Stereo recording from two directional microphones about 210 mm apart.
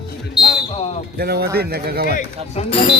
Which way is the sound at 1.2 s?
50° right (ahead or behind).